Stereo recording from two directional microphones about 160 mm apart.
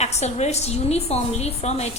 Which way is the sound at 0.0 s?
45° left (ahead or behind).